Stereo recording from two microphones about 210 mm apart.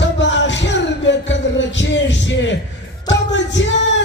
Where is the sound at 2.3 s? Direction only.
60° left (ahead or behind).